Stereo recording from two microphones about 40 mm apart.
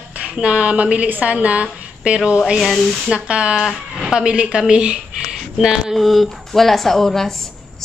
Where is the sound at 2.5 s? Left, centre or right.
Centre.